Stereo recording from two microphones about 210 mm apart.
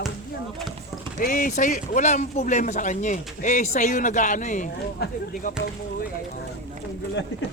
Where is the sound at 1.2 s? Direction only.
40° left (ahead or behind).